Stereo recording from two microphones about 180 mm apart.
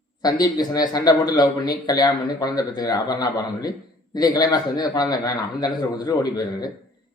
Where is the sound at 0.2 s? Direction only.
20° left (ahead or behind).